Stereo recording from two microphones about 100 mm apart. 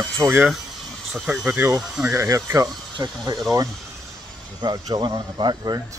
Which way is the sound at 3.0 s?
40° right (ahead or behind).